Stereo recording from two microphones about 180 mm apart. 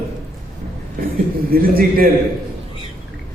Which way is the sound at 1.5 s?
55° right (ahead or behind).